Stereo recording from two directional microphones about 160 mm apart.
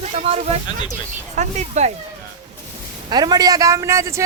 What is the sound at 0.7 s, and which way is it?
Speech, 25° left (ahead or behind).